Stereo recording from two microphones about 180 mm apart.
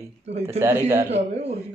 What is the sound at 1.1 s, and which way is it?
Speech, 35° right (ahead or behind).